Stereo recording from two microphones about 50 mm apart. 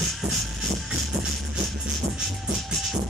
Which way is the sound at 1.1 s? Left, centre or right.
Centre.